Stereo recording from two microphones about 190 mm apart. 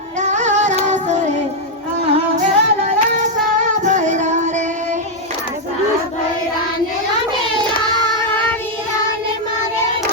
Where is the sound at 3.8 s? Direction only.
40° right (ahead or behind).